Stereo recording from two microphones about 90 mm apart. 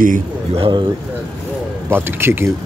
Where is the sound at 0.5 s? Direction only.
70° right (ahead or behind).